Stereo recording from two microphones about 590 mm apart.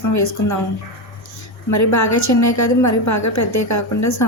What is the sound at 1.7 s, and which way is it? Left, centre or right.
A woman's voice, left.